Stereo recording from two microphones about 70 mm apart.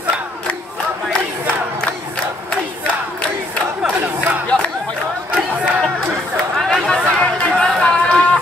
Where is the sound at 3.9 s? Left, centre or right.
Right.